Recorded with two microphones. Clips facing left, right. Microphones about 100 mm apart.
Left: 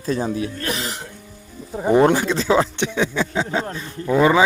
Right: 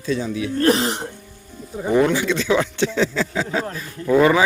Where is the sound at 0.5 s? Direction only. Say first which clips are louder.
Right 9 dB; 35° right (ahead or behind).